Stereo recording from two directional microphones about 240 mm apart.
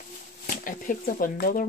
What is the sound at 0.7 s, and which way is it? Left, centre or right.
Speech, left.